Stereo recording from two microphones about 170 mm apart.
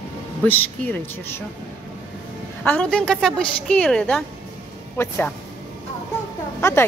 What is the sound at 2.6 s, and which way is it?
Speech, 10° left (ahead or behind).